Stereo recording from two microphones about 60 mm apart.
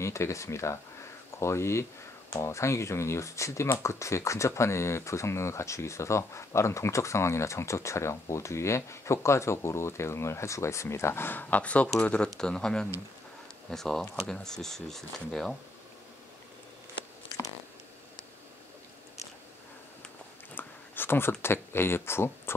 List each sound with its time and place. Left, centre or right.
0.0 s speech: left; by 15.5 s centre
20.5 s speech: left